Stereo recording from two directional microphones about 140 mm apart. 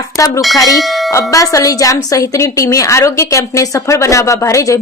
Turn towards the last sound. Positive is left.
turn(degrees=20)  # may be behind; listen again after turning